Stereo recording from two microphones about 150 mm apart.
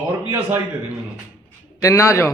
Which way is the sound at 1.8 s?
20° left (ahead or behind).